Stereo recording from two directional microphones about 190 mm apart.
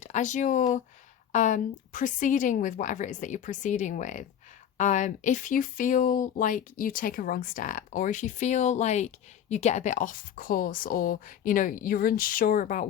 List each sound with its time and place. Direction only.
0.0 s a woman's voice: 40° left (ahead or behind)